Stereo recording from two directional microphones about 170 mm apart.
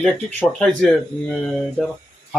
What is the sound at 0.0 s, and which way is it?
Speech, 10° left (ahead or behind).